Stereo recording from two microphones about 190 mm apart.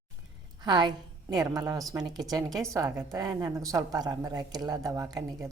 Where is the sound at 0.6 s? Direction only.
20° right (ahead or behind).